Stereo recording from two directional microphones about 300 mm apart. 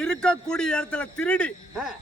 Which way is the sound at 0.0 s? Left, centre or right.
Centre.